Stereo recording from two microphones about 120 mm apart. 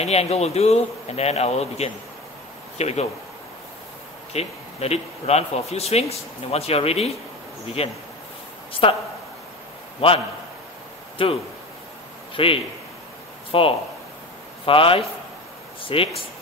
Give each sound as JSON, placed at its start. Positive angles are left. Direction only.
{"t": 0.0, "sound": "a man's voice", "side_deg": 60}
{"t": 4.3, "sound": "a man's voice", "side_deg": 60}
{"t": 9.9, "sound": "a man's voice", "side_deg": 50}
{"t": 12.4, "sound": "a man's voice", "side_deg": 50}